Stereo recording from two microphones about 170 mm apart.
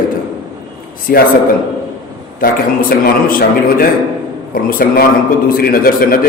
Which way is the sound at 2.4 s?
60° left (ahead or behind).